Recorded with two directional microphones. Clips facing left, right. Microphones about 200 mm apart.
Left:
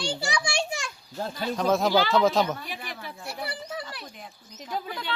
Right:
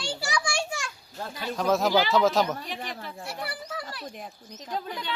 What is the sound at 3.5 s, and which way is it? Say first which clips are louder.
Children playing: left 1 dB; 20° left (ahead or behind).